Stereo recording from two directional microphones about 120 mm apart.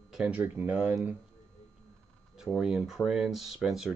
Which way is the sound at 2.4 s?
5° right (ahead or behind).